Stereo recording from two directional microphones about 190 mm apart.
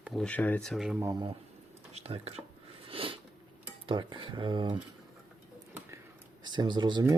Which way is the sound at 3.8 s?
25° right (ahead or behind).